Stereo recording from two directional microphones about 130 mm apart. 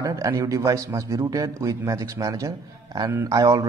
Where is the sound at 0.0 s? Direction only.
25° right (ahead or behind).